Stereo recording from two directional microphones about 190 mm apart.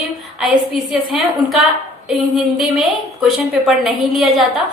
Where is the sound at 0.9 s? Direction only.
Centre (ahead or behind).